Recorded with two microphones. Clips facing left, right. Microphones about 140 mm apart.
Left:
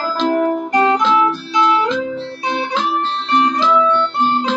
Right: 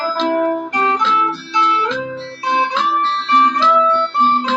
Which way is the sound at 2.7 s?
15° left (ahead or behind).